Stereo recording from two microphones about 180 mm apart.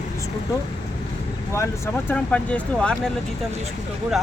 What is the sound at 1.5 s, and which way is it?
Speech, 15° left (ahead or behind).